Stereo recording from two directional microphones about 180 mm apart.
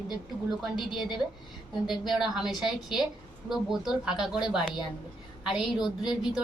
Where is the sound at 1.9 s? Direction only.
Centre (ahead or behind).